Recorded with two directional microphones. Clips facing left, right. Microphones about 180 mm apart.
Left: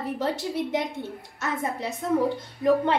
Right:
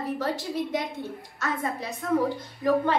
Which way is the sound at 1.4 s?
20° left (ahead or behind).